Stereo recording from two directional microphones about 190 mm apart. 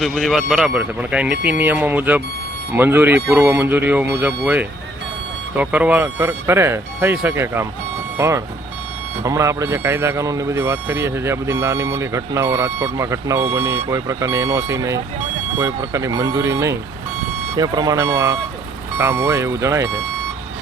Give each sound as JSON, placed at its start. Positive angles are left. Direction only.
{"t": 0.0, "sound": "speech", "side_deg": 0}